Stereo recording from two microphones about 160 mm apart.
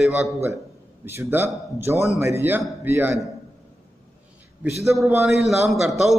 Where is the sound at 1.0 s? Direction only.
15° right (ahead or behind).